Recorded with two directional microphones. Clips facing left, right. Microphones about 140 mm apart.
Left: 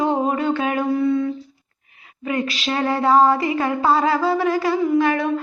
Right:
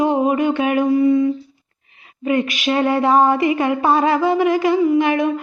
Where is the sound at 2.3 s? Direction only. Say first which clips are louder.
Right 5 dB; 20° right (ahead or behind).